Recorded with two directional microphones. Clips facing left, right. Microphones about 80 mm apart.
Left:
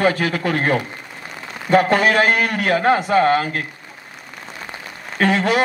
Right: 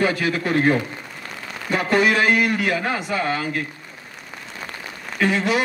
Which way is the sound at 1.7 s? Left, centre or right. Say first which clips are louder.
Left 4 dB; left.